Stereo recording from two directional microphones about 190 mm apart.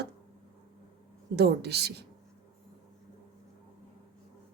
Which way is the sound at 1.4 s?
60° right (ahead or behind).